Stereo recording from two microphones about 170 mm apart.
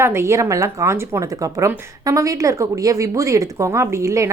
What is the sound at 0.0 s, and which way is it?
Speech, 15° right (ahead or behind).